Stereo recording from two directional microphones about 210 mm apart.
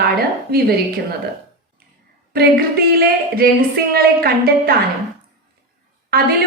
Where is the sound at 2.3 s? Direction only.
45° right (ahead or behind).